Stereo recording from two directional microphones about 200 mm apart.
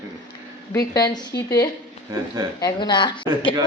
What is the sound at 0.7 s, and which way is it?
Speech, 20° left (ahead or behind).